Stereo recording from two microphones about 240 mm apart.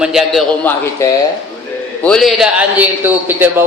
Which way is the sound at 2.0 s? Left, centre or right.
Centre.